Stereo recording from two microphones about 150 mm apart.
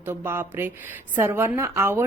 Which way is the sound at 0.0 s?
15° right (ahead or behind).